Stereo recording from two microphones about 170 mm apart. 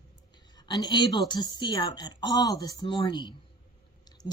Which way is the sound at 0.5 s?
25° left (ahead or behind).